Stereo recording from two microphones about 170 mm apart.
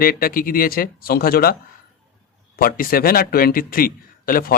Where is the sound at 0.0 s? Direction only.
60° left (ahead or behind).